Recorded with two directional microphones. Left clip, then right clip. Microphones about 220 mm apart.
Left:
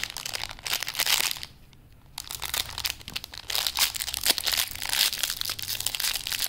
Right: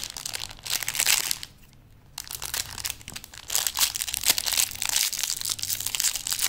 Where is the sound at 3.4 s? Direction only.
5° right (ahead or behind).